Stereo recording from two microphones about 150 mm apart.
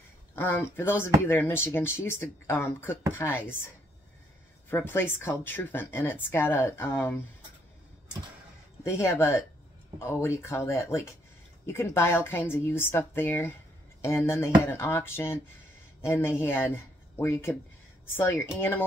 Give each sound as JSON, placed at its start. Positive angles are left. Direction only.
{"t": 0.4, "sound": "speech", "side_deg": 15}
{"t": 4.6, "sound": "speech", "side_deg": 15}
{"t": 8.8, "sound": "speech", "side_deg": 20}